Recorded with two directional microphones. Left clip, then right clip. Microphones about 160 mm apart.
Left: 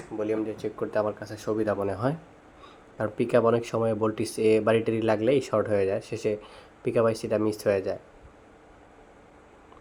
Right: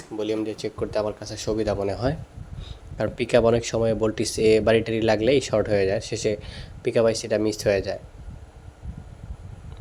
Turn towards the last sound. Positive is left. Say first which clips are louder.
# right 3 dB
turn(degrees=-35)  # may be behind; listen again after turning